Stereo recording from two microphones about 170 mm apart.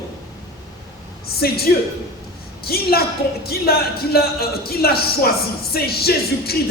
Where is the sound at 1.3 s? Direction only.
65° left (ahead or behind).